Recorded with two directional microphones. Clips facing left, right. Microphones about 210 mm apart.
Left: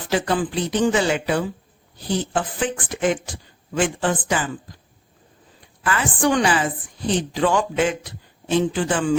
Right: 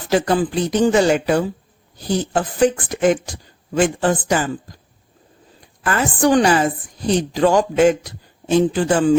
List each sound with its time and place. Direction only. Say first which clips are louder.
0.1 s speech: right 4 dB; 40° right (ahead or behind)
5.8 s speech: right 4 dB; 40° right (ahead or behind)